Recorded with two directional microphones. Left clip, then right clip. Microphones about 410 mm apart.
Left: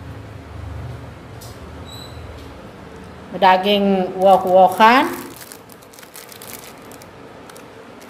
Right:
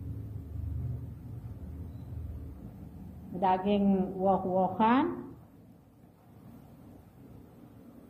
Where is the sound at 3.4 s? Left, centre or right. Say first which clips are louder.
Left 15 dB; left.